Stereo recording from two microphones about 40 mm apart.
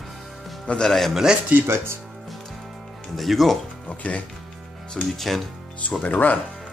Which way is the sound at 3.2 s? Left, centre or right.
Centre.